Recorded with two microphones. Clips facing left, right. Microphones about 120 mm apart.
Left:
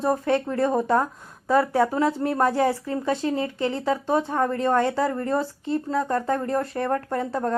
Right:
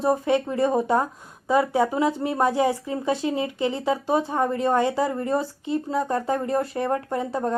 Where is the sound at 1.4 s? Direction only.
20° right (ahead or behind).